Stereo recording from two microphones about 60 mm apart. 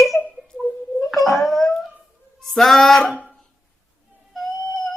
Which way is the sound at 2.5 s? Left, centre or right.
Centre.